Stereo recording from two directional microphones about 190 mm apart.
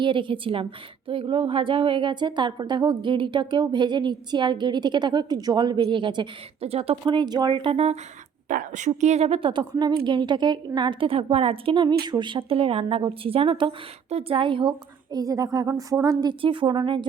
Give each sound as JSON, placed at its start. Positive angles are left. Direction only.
{"t": 0.0, "sound": "a woman's voice", "side_deg": -25}
{"t": 8.4, "sound": "a woman's voice", "side_deg": -45}